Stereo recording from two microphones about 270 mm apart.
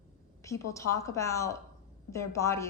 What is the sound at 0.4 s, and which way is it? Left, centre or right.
A woman's voice, centre.